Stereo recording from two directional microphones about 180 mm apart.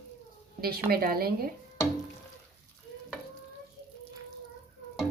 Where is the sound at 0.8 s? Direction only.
55° right (ahead or behind).